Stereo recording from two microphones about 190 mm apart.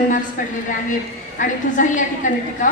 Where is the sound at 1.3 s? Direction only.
40° left (ahead or behind).